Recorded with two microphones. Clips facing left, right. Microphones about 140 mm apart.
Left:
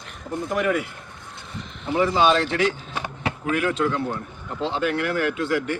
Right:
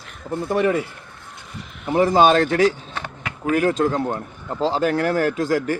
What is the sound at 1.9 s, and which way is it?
Speech, 40° right (ahead or behind).